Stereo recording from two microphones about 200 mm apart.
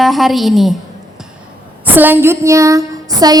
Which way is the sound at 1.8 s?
10° right (ahead or behind).